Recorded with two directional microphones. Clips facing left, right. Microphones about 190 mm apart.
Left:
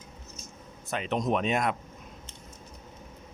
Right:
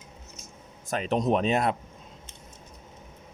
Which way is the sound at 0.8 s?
40° right (ahead or behind).